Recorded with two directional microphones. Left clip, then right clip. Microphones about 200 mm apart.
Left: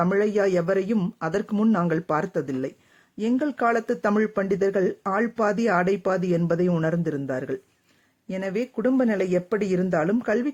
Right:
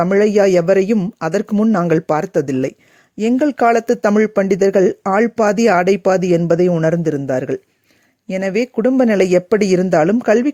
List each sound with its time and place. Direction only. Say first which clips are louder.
0.0 s speech: right 9 dB; 40° right (ahead or behind)